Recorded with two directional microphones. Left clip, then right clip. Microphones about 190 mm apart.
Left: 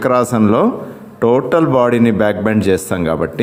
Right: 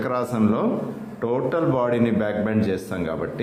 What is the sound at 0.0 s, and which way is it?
A man's voice, 40° left (ahead or behind).